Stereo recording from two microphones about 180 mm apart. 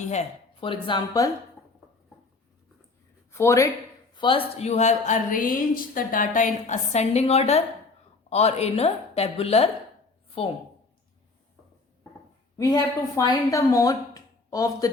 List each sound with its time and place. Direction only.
0.0 s speech: 40° left (ahead or behind); by 1.3 s 20° left (ahead or behind)
3.3 s a man's voice: 15° left (ahead or behind)
4.1 s a woman's voice: 25° left (ahead or behind)
12.5 s a woman's voice: 20° left (ahead or behind)